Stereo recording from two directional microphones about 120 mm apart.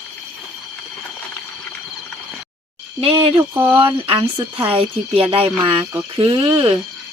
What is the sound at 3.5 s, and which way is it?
Speech, 20° right (ahead or behind).